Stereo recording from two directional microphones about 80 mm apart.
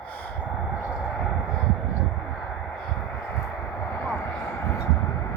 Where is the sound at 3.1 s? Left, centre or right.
Centre.